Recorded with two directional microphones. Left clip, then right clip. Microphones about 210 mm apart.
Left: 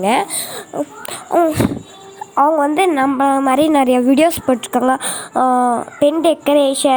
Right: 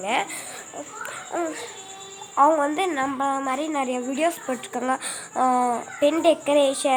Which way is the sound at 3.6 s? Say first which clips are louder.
Left 13 dB; 40° left (ahead or behind).